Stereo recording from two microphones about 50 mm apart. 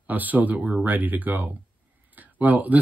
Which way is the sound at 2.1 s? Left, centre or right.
Right.